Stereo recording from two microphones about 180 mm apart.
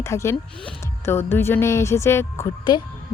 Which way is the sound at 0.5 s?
5° left (ahead or behind).